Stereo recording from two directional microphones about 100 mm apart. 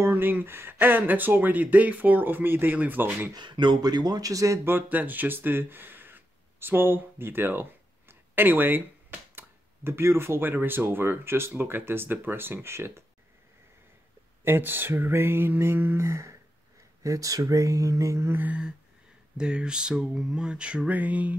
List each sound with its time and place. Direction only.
0.0 s speech: 20° right (ahead or behind)
3.3 s speech: 50° right (ahead or behind); by 4.6 s 35° right (ahead or behind)
4.6 s speech: 20° right (ahead or behind)
14.4 s speech: 20° right (ahead or behind)
19.3 s a sound: 10° right (ahead or behind)